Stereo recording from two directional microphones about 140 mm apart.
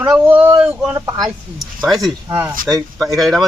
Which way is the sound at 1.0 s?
20° right (ahead or behind).